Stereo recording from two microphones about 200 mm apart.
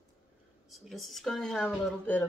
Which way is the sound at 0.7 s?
Centre (ahead or behind).